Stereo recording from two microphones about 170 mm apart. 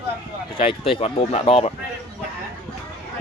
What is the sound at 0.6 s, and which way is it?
Speech, 35° left (ahead or behind).